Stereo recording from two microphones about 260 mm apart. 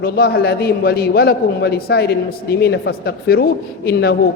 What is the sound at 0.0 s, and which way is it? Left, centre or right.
A man's voice, left.